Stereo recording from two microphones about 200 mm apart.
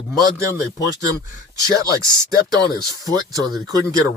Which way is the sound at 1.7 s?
15° right (ahead or behind).